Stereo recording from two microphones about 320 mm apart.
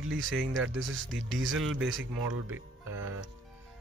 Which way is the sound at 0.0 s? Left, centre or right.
Right.